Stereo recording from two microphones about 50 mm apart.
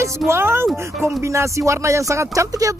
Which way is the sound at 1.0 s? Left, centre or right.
Right.